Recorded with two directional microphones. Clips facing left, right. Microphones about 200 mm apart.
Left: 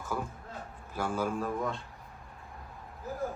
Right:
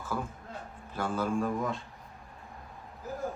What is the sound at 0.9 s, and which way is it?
Speech, 10° left (ahead or behind).